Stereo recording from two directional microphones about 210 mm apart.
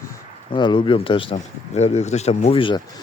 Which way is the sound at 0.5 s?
20° left (ahead or behind).